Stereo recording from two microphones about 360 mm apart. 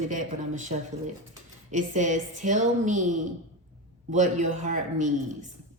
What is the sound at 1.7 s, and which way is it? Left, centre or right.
A woman's voice, centre.